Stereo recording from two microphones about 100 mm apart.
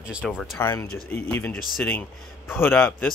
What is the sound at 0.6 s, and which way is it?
Speech, 25° left (ahead or behind).